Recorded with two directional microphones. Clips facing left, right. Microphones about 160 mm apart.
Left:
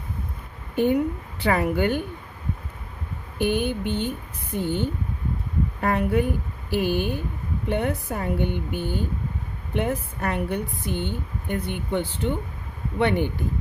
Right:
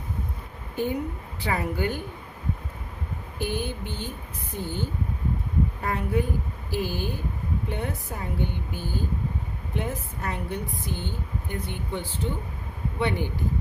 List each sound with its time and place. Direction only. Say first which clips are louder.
1.4 s a woman's voice: left 6 dB; 65° left (ahead or behind)
3.3 s a woman's voice: left 7 dB; 65° left (ahead or behind)